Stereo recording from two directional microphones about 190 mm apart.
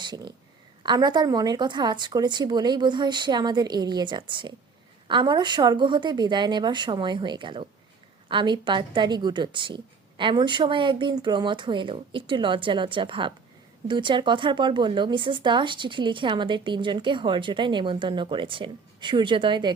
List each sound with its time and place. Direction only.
0.0 s speech: 25° right (ahead or behind)